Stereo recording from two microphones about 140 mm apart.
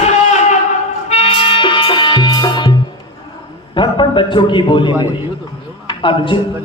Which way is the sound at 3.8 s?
35° left (ahead or behind).